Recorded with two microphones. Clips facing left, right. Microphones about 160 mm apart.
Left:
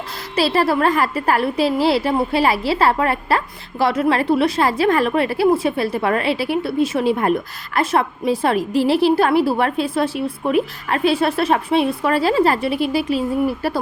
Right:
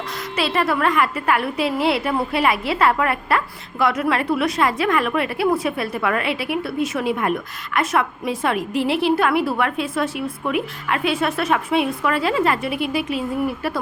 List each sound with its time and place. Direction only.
0.3 s a woman's voice: 35° left (ahead or behind)